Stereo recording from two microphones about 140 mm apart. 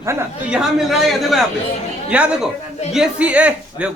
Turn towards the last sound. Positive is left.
turn(degrees=-10)  # may be behind; listen again after turning